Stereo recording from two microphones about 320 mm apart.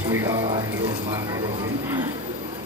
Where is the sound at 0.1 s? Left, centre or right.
Centre.